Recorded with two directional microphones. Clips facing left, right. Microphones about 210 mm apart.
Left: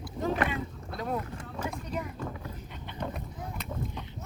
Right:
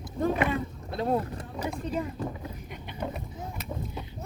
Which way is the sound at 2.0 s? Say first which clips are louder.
Right 4 dB; 30° right (ahead or behind).